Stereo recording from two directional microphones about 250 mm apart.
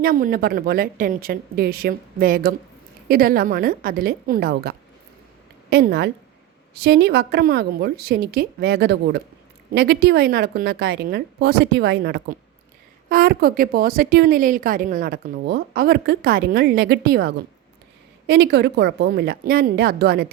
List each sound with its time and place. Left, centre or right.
0.0 s a woman's voice: right